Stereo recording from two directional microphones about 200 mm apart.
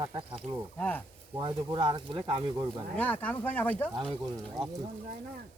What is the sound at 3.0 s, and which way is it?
Speech, 10° left (ahead or behind).